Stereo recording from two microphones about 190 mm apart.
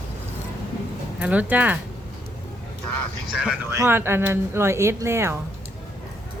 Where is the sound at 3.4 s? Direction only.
10° right (ahead or behind).